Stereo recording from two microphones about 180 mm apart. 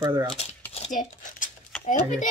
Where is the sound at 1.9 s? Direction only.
45° left (ahead or behind).